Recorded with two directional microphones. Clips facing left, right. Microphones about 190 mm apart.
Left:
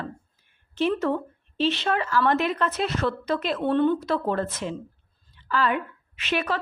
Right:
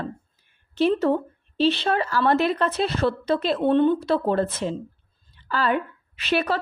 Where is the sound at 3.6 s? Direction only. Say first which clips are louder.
Right 2 dB; 20° right (ahead or behind); by 6.6 s 35° right (ahead or behind).